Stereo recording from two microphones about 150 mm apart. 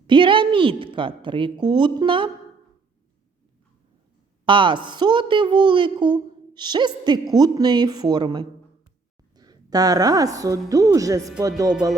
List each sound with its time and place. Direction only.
0.1 s a woman's voice: 35° right (ahead or behind)
4.4 s a woman's voice: 35° right (ahead or behind)